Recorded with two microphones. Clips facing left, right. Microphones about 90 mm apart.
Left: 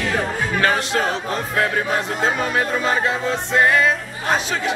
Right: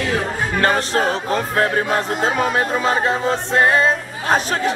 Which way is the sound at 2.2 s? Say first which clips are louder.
Right 2 dB; 50° right (ahead or behind).